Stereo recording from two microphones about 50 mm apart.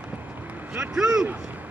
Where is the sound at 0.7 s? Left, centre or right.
Centre.